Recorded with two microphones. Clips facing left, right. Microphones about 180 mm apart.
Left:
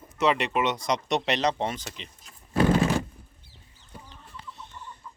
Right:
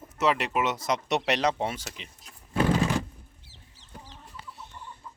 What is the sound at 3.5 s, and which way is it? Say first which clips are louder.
Chicken: left 1 dB; 90° right.